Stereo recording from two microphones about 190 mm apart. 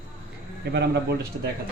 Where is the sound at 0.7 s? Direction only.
60° right (ahead or behind).